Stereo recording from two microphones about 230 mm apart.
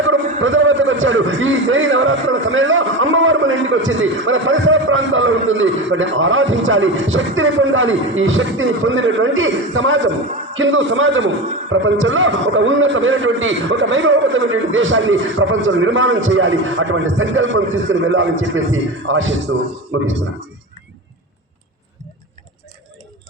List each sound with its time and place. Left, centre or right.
0.1 s a man's voice: right